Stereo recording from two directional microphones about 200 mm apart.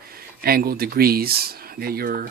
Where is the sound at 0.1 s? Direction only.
50° right (ahead or behind).